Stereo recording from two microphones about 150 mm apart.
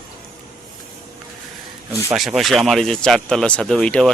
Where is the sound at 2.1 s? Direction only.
Centre (ahead or behind).